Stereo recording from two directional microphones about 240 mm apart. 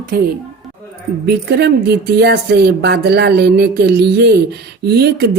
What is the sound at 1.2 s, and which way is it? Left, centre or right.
Speech, right.